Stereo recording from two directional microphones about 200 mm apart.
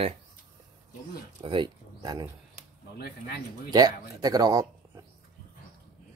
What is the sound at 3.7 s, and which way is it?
Speech, 20° right (ahead or behind).